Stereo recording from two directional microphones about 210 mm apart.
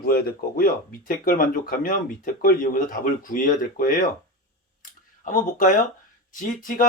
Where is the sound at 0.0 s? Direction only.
45° left (ahead or behind).